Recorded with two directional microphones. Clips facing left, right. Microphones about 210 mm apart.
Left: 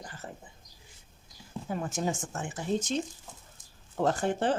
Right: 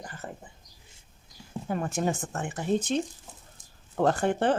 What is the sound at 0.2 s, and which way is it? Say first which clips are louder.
Whispering: right 4 dB; 65° right (ahead or behind).